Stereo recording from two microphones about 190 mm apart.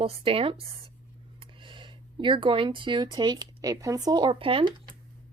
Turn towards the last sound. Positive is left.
turn(degrees=-30)  # may be behind; listen again after turning